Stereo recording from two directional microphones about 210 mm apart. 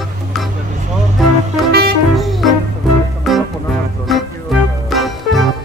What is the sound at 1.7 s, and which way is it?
Music, 50° right (ahead or behind).